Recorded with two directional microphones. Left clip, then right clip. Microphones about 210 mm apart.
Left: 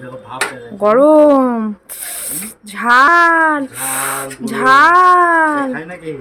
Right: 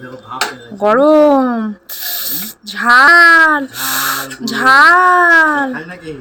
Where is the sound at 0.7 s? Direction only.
Centre (ahead or behind).